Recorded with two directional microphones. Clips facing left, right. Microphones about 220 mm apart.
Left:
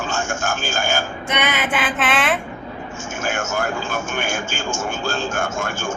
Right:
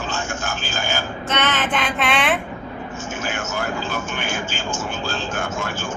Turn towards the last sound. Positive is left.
turn(degrees=45)  # may be behind; listen again after turning